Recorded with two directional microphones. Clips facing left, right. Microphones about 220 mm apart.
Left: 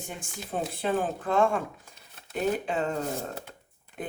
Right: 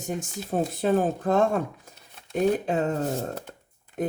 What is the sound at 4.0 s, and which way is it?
Speech, 45° right (ahead or behind).